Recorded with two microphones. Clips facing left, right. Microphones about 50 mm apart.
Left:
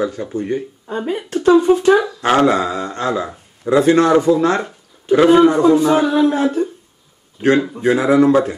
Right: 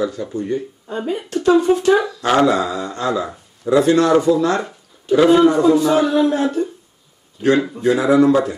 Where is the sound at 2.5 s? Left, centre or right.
Left.